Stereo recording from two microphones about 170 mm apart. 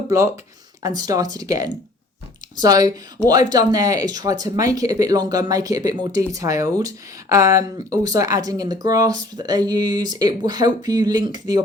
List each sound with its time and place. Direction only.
0.8 s speech: 20° right (ahead or behind)